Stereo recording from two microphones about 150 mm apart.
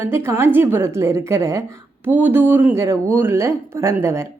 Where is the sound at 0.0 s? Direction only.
15° right (ahead or behind).